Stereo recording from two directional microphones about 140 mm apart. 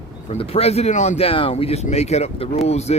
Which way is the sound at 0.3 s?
45° left (ahead or behind).